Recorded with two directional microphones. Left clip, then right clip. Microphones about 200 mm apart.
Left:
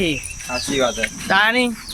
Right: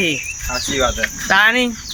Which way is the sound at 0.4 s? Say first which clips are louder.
Right 1 dB; 5° right (ahead or behind).